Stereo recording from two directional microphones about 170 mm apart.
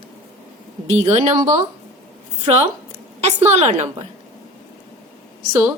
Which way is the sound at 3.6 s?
40° right (ahead or behind).